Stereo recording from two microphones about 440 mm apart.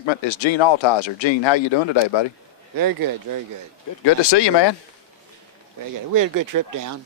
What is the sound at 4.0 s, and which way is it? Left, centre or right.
Speech, left.